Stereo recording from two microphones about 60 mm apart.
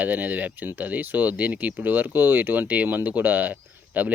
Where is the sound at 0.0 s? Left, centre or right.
Right.